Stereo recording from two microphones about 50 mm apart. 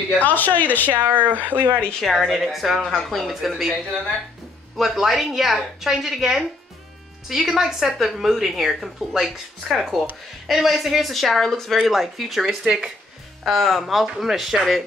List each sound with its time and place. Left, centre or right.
0.2 s a woman's voice: left
0.8 s speech: right
2.3 s speech: centre
2.8 s speech: centre
13.4 s speech: centre